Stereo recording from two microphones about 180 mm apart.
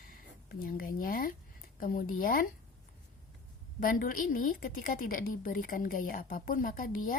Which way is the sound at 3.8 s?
50° left (ahead or behind).